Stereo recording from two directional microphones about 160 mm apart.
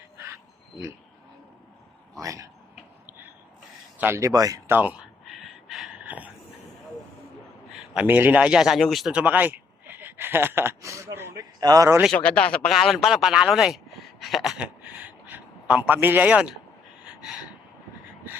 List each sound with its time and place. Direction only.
2.2 s speech: 20° right (ahead or behind)
3.9 s speech: 15° right (ahead or behind)
4.8 s speech: 10° right (ahead or behind)
5.6 s a sound: centre (ahead or behind)
7.9 s speech: 10° right (ahead or behind)
12.1 s speech: 10° left (ahead or behind)
17.2 s gasp: 5° right (ahead or behind)